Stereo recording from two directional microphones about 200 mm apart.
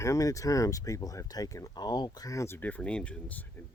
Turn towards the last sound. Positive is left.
turn(degrees=10)  # may be behind; listen again after turning